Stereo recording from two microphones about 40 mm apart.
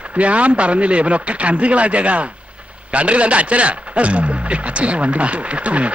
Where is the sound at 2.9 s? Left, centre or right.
Right.